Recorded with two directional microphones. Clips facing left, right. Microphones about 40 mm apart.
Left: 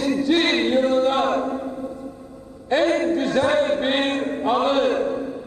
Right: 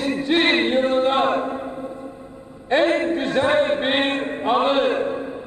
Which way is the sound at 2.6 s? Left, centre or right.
Right.